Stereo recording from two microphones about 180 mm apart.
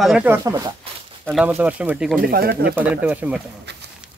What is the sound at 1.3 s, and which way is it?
Speech, 5° right (ahead or behind).